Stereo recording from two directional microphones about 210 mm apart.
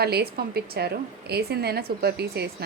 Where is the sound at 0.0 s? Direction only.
50° right (ahead or behind).